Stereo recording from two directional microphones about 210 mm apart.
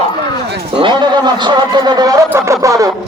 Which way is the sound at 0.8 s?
20° right (ahead or behind).